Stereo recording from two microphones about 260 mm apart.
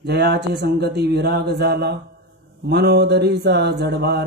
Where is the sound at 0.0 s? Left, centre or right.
Right.